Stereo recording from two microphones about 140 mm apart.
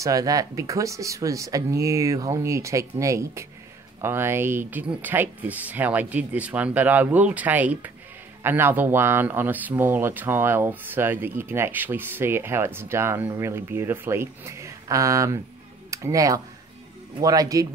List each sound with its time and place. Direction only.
0.0 s speech: 25° right (ahead or behind)